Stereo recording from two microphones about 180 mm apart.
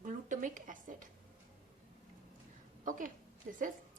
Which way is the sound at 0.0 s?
45° right (ahead or behind).